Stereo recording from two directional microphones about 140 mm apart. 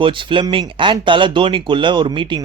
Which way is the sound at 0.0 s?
35° right (ahead or behind).